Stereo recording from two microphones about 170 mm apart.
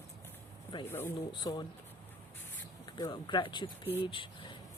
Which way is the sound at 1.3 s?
25° left (ahead or behind).